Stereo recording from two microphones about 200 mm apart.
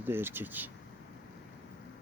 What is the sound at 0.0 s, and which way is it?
Speech, 10° right (ahead or behind).